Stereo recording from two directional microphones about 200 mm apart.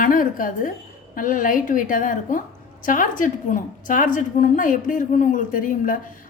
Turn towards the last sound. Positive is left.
turn(degrees=40)  # may be behind; listen again after turning